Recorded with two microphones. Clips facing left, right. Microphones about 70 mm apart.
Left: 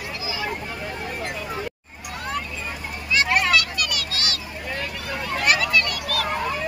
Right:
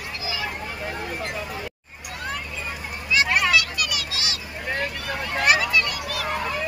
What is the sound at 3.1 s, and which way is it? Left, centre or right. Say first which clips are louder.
Children playing: even; centre.